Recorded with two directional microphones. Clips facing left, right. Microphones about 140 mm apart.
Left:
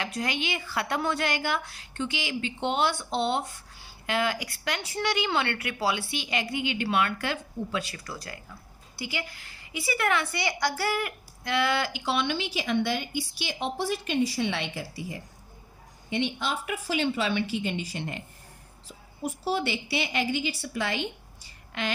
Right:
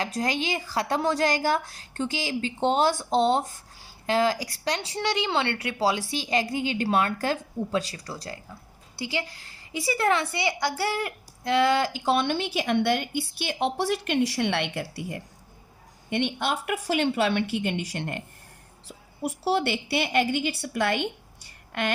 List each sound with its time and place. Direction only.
0.0 s speech: 40° right (ahead or behind); by 18.2 s 60° right (ahead or behind)
19.2 s speech: 65° right (ahead or behind)